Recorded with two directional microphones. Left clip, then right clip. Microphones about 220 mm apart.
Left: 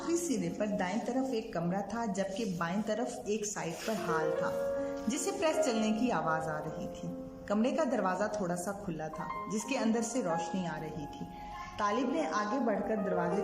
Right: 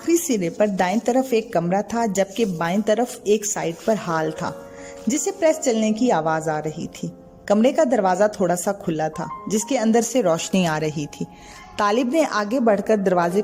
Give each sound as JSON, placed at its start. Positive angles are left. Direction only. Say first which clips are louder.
{"t": 0.1, "sound": "a sound", "louder": "right 14 dB", "side_deg": 0}
{"t": 0.4, "sound": "speech", "louder": "right 14 dB", "side_deg": -40}
{"t": 10.2, "sound": "speech", "louder": "right 14 dB", "side_deg": -45}